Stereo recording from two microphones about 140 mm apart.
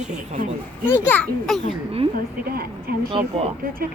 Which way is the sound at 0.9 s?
15° left (ahead or behind).